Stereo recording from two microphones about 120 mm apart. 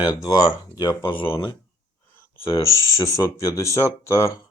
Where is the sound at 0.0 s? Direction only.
40° left (ahead or behind).